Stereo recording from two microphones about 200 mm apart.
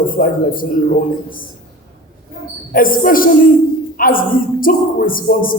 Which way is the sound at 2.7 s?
45° left (ahead or behind).